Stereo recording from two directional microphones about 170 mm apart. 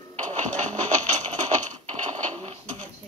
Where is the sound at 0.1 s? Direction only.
45° right (ahead or behind).